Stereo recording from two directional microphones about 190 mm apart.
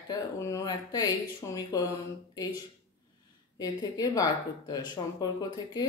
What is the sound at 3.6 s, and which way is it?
Speech, 20° left (ahead or behind).